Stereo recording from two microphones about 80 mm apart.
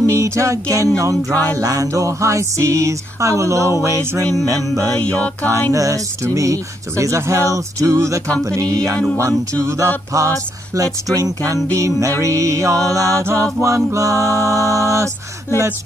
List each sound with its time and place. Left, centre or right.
0.0 s music: right
4.9 s music: centre
5.7 s speech: right
9.6 s music: right
10.1 s speech: right
11.7 s music: right